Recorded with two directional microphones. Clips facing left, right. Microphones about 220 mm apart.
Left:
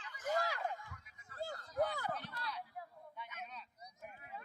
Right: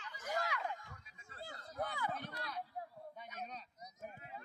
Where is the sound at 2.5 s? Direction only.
40° right (ahead or behind).